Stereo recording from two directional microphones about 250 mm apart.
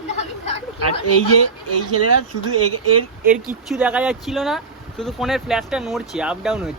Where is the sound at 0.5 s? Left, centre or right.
Left.